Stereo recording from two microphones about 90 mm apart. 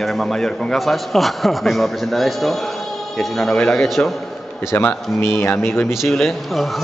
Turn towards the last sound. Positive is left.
turn(degrees=0)  # may be behind; listen again after turning